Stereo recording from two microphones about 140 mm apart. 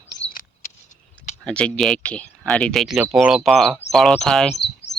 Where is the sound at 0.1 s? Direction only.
90° left.